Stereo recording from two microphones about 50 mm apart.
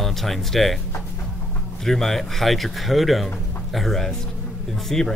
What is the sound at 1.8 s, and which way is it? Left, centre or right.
Speech, centre.